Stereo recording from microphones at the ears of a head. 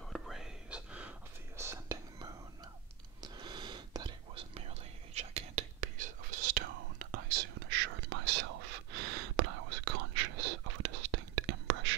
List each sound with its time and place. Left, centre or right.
3.2 s whispering: right